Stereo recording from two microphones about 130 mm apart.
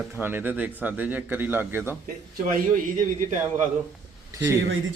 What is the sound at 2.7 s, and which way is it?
Speech, 90° right.